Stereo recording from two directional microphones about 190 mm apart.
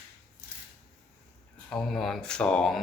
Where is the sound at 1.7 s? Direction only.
Centre (ahead or behind).